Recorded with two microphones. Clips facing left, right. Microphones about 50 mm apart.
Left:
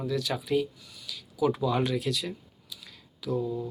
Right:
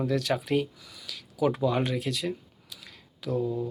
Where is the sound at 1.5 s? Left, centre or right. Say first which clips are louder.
Right 1 dB; right.